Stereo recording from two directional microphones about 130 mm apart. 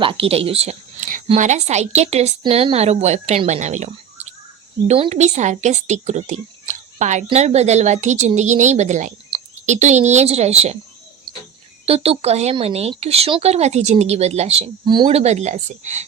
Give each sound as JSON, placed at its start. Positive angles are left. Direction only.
{"t": 0.0, "sound": "speech", "side_deg": -45}
{"t": 1.4, "sound": "a woman's voice", "side_deg": -65}
{"t": 2.4, "sound": "a woman's voice", "side_deg": -45}
{"t": 11.9, "sound": "speech", "side_deg": -50}
{"t": 14.8, "sound": "speech", "side_deg": -35}
{"t": 15.1, "sound": "a woman's voice", "side_deg": -55}